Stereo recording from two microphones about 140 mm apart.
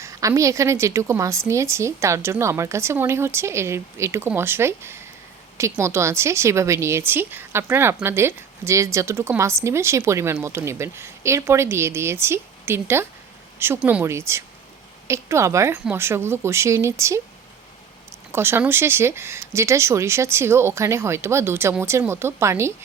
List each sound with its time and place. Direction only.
0.0 s speech: 25° right (ahead or behind)
18.3 s speech: 15° right (ahead or behind)